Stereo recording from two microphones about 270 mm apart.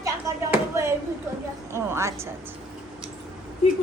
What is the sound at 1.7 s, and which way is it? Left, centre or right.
Speech, centre.